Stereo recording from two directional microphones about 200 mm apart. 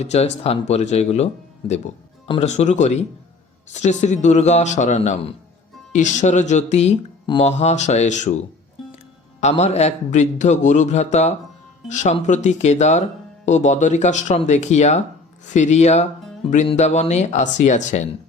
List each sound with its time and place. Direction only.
0.0 s speech: 35° left (ahead or behind)
9.4 s speech: 35° left (ahead or behind)